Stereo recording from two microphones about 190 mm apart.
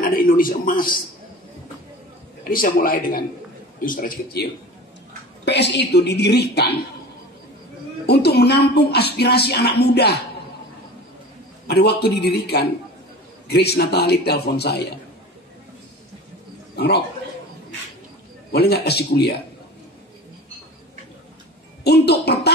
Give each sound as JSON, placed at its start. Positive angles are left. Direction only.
{"t": 0.0, "sound": "a sound", "side_deg": 50}
{"t": 2.4, "sound": "a man's voice", "side_deg": 50}
{"t": 5.4, "sound": "speech", "side_deg": 65}
{"t": 8.1, "sound": "speech", "side_deg": 60}
{"t": 11.6, "sound": "speech", "side_deg": 60}
{"t": 16.7, "sound": "a man's voice", "side_deg": 60}
{"t": 18.5, "sound": "speech", "side_deg": 55}
{"t": 21.8, "sound": "speech", "side_deg": 60}